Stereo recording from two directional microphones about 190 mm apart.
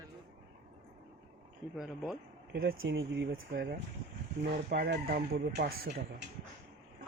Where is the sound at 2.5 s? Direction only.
55° right (ahead or behind).